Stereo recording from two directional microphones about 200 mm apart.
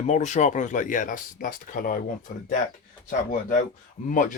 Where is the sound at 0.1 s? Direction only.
35° left (ahead or behind).